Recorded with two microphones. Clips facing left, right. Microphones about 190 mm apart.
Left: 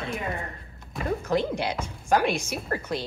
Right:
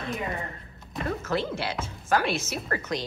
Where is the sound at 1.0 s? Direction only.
15° left (ahead or behind).